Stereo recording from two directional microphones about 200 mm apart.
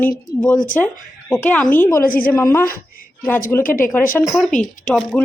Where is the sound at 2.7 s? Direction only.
45° left (ahead or behind).